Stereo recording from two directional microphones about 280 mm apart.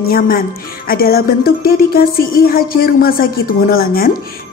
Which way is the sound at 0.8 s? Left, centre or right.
Left.